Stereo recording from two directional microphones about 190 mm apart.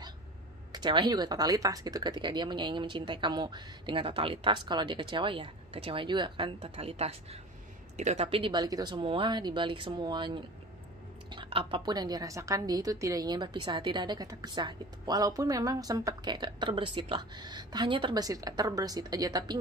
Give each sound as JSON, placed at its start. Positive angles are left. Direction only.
{"t": 0.7, "sound": "a woman's voice", "side_deg": -25}